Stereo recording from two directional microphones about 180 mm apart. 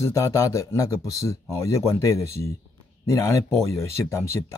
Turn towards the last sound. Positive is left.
turn(degrees=15)  # may be behind; listen again after turning